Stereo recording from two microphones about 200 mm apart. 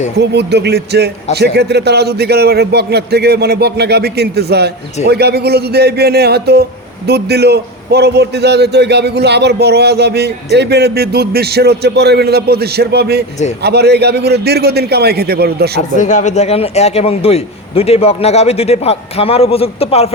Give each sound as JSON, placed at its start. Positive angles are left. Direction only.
{"t": 0.2, "sound": "a man's voice", "side_deg": -55}
{"t": 16.0, "sound": "a man's voice", "side_deg": 40}